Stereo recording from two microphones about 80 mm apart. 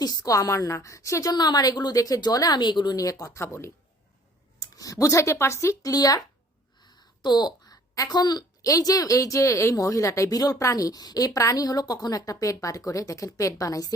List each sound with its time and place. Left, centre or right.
0.0 s a woman's voice: left
1.3 s speech: left
2.0 s a woman's voice: left
4.6 s speech: left
5.9 s a woman's voice: left
6.8 s a sound: left
7.9 s a woman's voice: left